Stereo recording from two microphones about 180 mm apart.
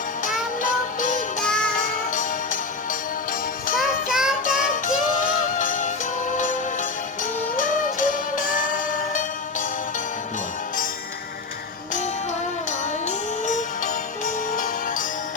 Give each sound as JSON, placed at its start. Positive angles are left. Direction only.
{"t": 0.6, "sound": "music", "side_deg": 45}
{"t": 3.8, "sound": "music", "side_deg": 0}
{"t": 4.4, "sound": "music", "side_deg": 45}
{"t": 12.8, "sound": "music", "side_deg": 45}